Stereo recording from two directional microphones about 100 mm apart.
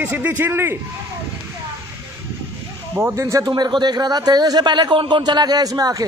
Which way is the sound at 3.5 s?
50° right (ahead or behind).